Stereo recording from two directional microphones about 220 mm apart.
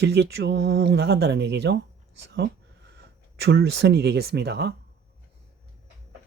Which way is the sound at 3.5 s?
55° right (ahead or behind).